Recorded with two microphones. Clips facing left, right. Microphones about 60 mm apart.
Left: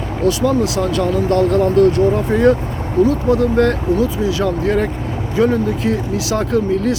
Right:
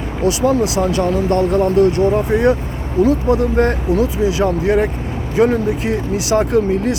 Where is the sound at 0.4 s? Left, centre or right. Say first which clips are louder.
Right 1 dB; centre.